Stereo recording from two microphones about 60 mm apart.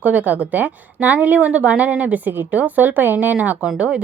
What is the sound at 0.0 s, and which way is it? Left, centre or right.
A woman's voice, right.